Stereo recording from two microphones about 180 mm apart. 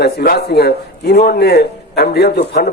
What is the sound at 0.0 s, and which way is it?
A man's voice, 65° left (ahead or behind).